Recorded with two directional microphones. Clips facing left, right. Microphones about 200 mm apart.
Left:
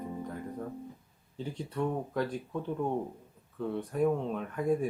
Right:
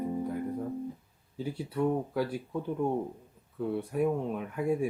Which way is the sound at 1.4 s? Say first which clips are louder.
Right 3 dB; 10° right (ahead or behind).